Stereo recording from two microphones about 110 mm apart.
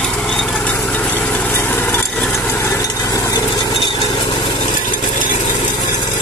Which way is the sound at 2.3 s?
20° left (ahead or behind).